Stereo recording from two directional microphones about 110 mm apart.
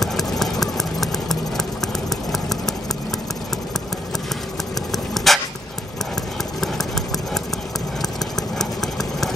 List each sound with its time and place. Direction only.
0.0 s engine: centre (ahead or behind)
4.9 s dog: centre (ahead or behind)
8.4 s engine: 5° left (ahead or behind)